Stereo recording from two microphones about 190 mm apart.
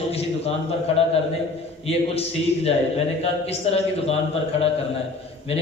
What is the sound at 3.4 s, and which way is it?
A man's voice, 30° left (ahead or behind).